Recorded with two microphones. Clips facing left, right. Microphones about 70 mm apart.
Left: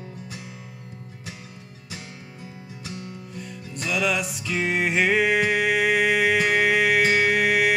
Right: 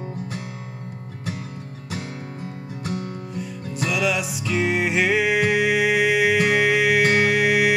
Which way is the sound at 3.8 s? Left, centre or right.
Centre.